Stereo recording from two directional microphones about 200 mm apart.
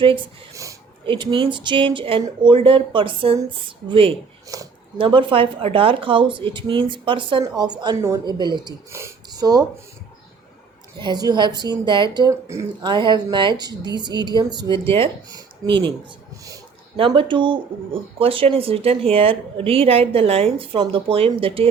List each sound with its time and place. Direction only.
0.0 s speech: 25° right (ahead or behind)
11.0 s speech: 20° right (ahead or behind)
17.0 s speech: 25° right (ahead or behind)